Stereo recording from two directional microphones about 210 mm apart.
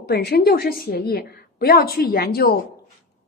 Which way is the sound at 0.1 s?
50° left (ahead or behind).